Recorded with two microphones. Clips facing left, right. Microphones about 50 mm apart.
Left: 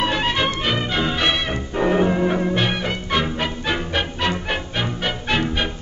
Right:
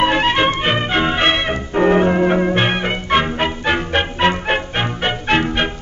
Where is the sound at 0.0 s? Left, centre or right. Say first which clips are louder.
Right 6 dB; right.